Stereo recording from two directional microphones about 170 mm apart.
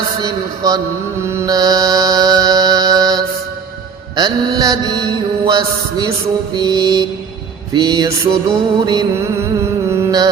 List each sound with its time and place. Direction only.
0.2 s mantra: 20° right (ahead or behind)
9.9 s music: 20° right (ahead or behind)